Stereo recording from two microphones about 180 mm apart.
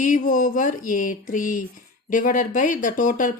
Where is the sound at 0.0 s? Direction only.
45° left (ahead or behind).